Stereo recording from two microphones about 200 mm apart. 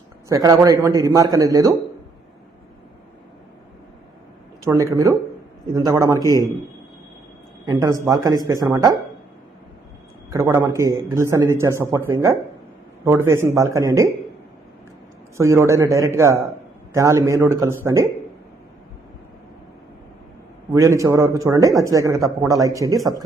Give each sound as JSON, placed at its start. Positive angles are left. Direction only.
{"t": 0.3, "sound": "a man's voice", "side_deg": -15}
{"t": 4.6, "sound": "a man's voice", "side_deg": -15}
{"t": 6.1, "sound": "a man's voice", "side_deg": 15}
{"t": 7.8, "sound": "a man's voice", "side_deg": -15}
{"t": 10.3, "sound": "a man's voice", "side_deg": -15}
{"t": 15.4, "sound": "a man's voice", "side_deg": -15}
{"t": 20.7, "sound": "a man's voice", "side_deg": -15}